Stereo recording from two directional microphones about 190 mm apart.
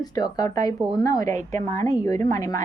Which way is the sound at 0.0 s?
20° left (ahead or behind).